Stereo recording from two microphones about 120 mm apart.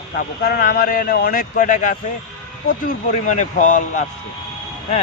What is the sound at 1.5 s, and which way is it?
Speech, 90° left.